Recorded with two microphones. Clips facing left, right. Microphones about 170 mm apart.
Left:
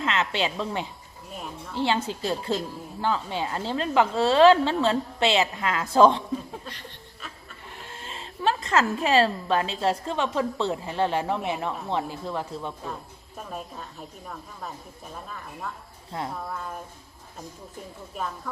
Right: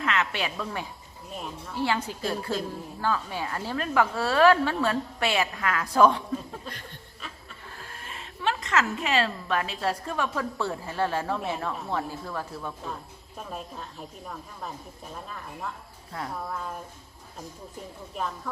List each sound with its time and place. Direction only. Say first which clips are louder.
0.0 s a woman's voice: left 2 dB; 25° left (ahead or behind)
7.8 s a woman's voice: left 3 dB; 25° left (ahead or behind)
13.3 s speech: left 1 dB; centre (ahead or behind)
15.1 s speech: even; centre (ahead or behind)
16.1 s a woman's voice: left 3 dB; 20° left (ahead or behind)
16.5 s speech: even; centre (ahead or behind)
18.1 s speech: even; centre (ahead or behind)